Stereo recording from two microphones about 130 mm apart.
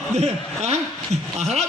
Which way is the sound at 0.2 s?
55° right (ahead or behind).